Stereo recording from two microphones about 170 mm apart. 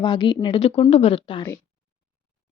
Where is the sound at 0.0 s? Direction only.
25° left (ahead or behind).